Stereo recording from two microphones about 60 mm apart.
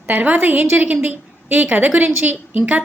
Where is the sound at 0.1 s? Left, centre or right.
Right.